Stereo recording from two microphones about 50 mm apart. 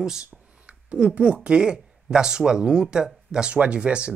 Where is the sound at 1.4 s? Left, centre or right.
Centre.